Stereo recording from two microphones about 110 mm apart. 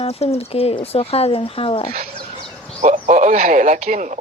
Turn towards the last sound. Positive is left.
turn(degrees=-90)